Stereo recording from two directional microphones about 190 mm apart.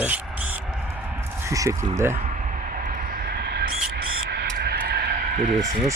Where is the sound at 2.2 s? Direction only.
40° right (ahead or behind).